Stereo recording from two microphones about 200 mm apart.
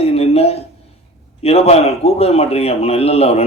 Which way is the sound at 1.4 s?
30° left (ahead or behind).